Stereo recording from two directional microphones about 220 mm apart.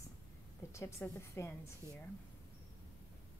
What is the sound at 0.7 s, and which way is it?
Speech, 10° left (ahead or behind).